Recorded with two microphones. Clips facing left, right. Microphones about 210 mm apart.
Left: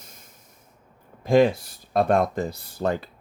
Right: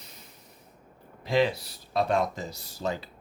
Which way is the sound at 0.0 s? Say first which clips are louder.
Even; 45° left (ahead or behind).